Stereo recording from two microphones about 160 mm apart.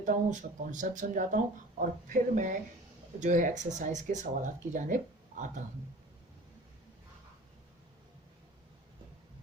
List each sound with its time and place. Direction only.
0.0 s speech: 50° right (ahead or behind)